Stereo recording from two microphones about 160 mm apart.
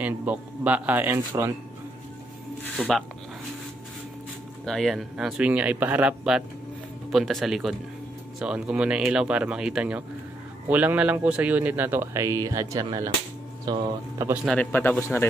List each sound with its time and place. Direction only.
0.0 s a man's voice: 10° right (ahead or behind)
2.8 s speech: 5° left (ahead or behind)
4.6 s a man's voice: centre (ahead or behind); by 14.4 s 15° right (ahead or behind)
14.4 s a man's voice: 5° left (ahead or behind)